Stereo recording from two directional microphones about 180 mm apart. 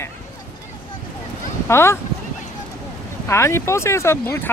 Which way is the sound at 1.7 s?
15° left (ahead or behind).